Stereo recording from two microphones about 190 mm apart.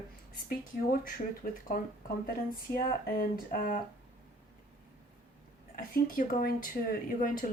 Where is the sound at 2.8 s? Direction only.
50° left (ahead or behind).